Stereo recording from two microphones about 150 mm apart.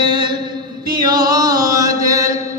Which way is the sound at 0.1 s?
30° right (ahead or behind).